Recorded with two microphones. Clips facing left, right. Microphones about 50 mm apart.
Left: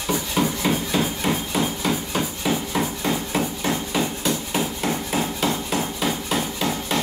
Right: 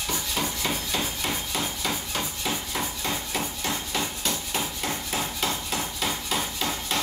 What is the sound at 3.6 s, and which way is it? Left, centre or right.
Hammer, centre.